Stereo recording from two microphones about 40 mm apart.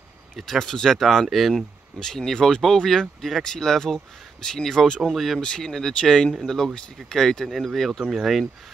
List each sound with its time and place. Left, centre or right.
0.4 s speech: centre
1.5 s speech: centre
5.1 s speech: centre
5.4 s speech: centre